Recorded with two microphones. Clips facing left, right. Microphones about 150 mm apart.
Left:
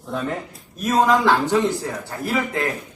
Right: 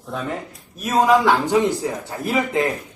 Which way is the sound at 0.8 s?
5° right (ahead or behind).